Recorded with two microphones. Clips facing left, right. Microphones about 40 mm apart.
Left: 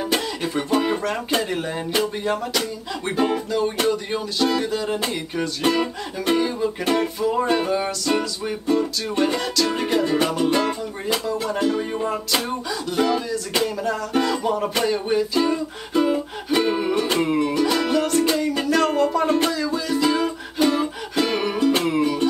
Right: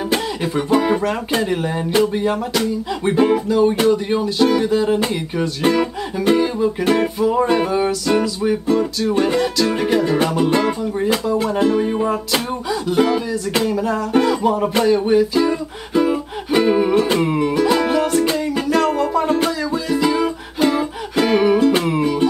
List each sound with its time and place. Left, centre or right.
0.1 s speech: centre
2.0 s music: centre
9.1 s music: centre
11.4 s music: right
11.8 s music: centre
18.8 s music: centre